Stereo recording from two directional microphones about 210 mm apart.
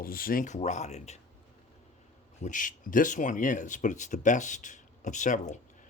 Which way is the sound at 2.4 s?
40° left (ahead or behind).